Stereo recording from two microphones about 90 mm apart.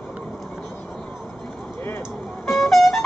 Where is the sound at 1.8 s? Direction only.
25° left (ahead or behind).